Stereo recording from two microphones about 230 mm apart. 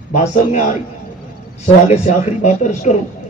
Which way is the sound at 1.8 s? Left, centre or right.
Left.